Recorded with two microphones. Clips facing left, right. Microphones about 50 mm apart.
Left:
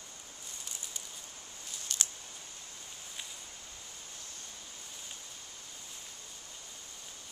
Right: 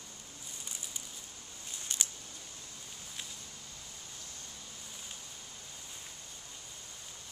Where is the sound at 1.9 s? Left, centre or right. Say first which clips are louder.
Even; right.